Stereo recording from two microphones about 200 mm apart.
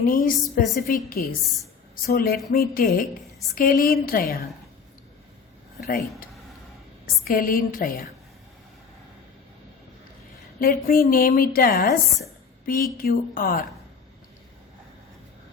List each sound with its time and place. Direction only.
0.0 s a woman's voice: 45° left (ahead or behind)
5.8 s a woman's voice: 45° left (ahead or behind)
10.6 s a woman's voice: 45° left (ahead or behind)